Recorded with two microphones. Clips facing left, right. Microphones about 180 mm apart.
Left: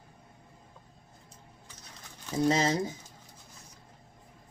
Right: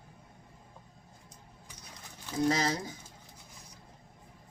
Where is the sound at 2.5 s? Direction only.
25° left (ahead or behind).